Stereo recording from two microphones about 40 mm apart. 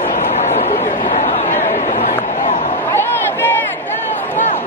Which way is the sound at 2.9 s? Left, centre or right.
Left.